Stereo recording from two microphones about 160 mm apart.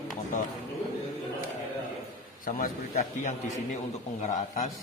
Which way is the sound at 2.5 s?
60° left (ahead or behind).